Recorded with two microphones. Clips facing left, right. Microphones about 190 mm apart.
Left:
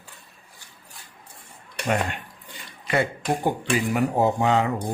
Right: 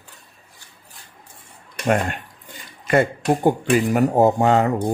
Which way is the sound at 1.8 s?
50° right (ahead or behind).